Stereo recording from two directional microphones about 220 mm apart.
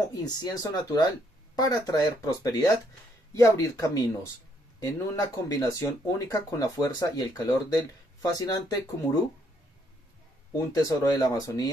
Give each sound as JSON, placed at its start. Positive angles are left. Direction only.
{"t": 0.1, "sound": "speech", "side_deg": 15}
{"t": 10.7, "sound": "speech", "side_deg": 15}